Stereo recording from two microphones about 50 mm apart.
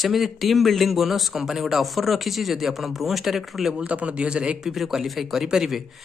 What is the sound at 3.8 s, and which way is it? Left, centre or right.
Speech, right.